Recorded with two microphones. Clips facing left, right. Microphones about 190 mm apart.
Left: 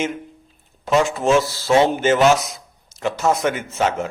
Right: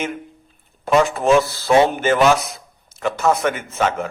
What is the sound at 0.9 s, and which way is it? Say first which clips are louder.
A man's voice: right 2 dB; 55° right (ahead or behind).